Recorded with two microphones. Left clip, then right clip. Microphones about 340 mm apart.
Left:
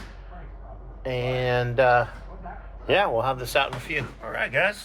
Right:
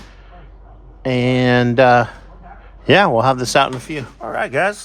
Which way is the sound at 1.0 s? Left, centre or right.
Right.